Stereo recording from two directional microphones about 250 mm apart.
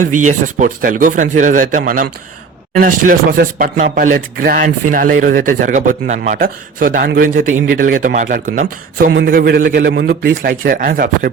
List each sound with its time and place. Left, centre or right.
0.3 s speech: right